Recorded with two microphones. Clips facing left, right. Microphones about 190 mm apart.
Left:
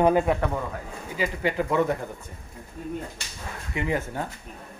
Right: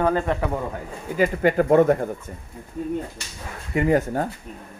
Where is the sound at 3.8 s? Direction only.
45° right (ahead or behind).